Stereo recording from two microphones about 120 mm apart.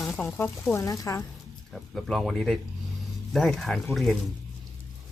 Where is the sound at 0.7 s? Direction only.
25° left (ahead or behind).